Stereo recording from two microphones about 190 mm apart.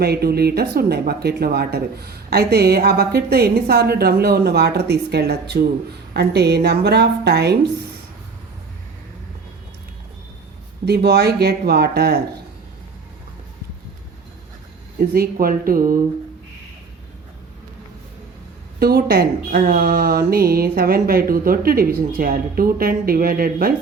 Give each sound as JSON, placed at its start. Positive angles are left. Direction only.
{"t": 0.0, "sound": "speech", "side_deg": -55}
{"t": 10.8, "sound": "speech", "side_deg": -60}
{"t": 14.9, "sound": "speech", "side_deg": -50}
{"t": 18.8, "sound": "speech", "side_deg": -55}